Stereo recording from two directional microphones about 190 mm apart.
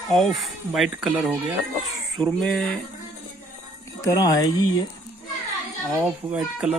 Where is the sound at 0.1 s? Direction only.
Centre (ahead or behind).